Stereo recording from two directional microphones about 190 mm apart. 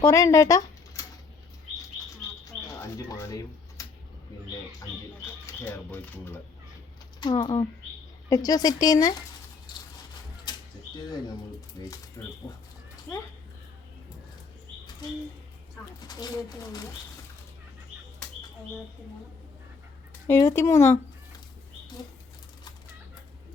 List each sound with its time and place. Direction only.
0.0 s speech: 15° left (ahead or behind)
2.0 s chirp: 20° left (ahead or behind)
3.1 s speech: 15° left (ahead or behind)
5.5 s speech: 10° left (ahead or behind)
7.2 s speech: 25° left (ahead or behind)
10.5 s bird: 20° left (ahead or behind)
11.8 s speech: 20° left (ahead or behind)
16.0 s speech: 20° left (ahead or behind)
20.2 s speech: 15° left (ahead or behind)